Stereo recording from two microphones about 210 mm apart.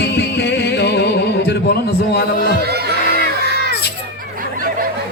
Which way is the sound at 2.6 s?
50° right (ahead or behind).